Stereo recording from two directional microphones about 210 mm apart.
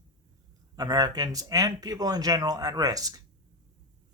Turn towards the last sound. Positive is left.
turn(degrees=-15)  # may be behind; listen again after turning